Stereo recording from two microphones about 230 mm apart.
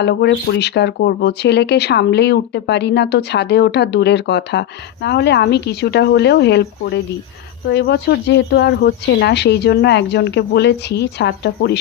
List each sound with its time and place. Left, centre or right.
0.0 s speech: left